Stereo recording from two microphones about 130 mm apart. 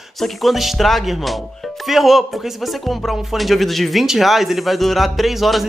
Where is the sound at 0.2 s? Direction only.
Centre (ahead or behind).